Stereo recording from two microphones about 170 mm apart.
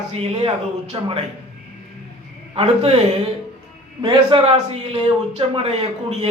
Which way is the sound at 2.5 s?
35° right (ahead or behind).